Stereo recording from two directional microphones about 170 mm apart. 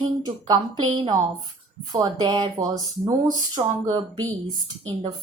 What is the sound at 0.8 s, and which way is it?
Speech, 25° right (ahead or behind).